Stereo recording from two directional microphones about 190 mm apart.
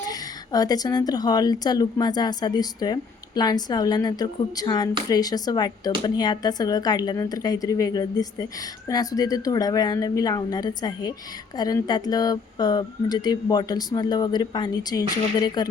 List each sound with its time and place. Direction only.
0.1 s a woman's voice: 20° left (ahead or behind)